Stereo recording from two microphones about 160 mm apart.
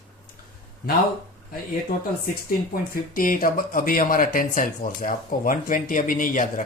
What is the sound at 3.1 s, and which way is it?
Speech, 60° left (ahead or behind).